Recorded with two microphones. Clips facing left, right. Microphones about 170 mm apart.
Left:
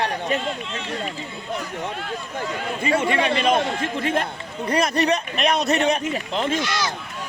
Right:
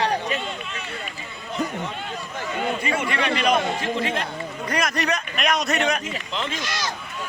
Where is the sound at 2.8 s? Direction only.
30° left (ahead or behind).